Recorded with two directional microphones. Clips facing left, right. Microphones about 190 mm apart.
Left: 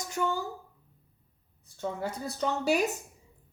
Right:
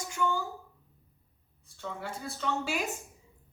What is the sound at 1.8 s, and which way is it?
A woman's voice, 40° left (ahead or behind).